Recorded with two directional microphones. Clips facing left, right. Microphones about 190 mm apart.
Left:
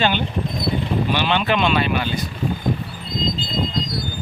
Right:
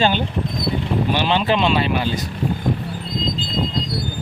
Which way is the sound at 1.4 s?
30° right (ahead or behind).